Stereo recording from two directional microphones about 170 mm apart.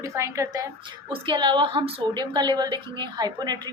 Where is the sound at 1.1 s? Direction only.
30° right (ahead or behind).